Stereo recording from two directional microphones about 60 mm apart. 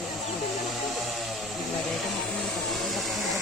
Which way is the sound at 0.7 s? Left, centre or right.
Centre.